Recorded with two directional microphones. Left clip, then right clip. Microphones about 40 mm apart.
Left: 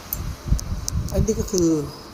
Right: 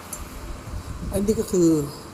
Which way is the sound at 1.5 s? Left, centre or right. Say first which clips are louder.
Right 1 dB; right.